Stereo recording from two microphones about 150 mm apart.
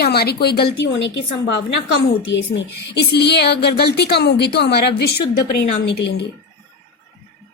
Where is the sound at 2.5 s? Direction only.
90° left.